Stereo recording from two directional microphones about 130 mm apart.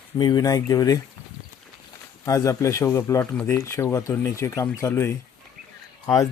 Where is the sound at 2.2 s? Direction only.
25° left (ahead or behind).